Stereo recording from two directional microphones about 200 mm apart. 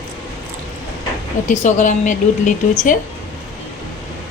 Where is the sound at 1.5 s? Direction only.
40° left (ahead or behind).